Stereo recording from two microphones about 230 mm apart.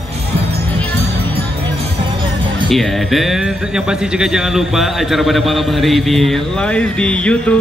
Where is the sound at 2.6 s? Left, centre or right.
Centre.